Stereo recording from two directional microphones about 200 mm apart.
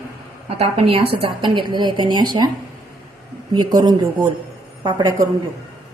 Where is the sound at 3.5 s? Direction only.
20° right (ahead or behind).